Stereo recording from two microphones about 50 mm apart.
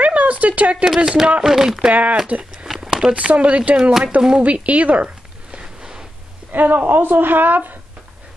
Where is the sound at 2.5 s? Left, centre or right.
Centre.